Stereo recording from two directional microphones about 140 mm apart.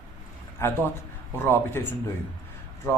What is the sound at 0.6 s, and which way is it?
A man's voice, 15° left (ahead or behind).